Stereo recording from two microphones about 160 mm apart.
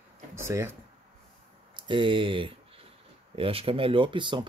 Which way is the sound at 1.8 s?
30° right (ahead or behind).